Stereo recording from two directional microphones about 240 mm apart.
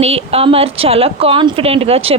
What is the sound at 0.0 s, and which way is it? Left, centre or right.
A woman's voice, right.